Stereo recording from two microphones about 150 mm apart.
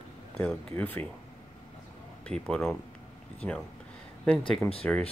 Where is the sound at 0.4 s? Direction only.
10° left (ahead or behind).